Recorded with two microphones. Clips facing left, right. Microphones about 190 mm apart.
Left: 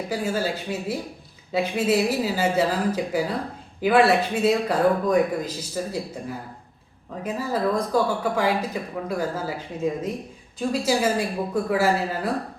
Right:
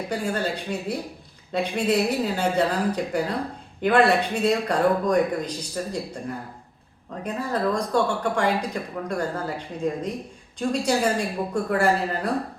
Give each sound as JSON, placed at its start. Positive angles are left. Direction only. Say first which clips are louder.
{"t": 0.1, "sound": "speech", "louder": "left 1 dB", "side_deg": 5}